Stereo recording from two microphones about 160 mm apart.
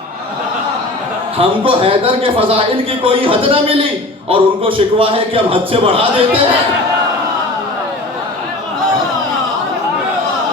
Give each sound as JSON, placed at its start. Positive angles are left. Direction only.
{"t": 1.4, "sound": "a man's voice", "side_deg": -35}